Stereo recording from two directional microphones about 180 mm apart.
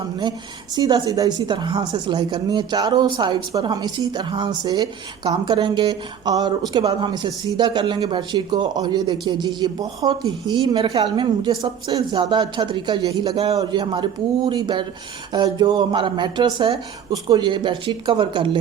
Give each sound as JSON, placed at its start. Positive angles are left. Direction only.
{"t": 0.8, "sound": "speech", "side_deg": -20}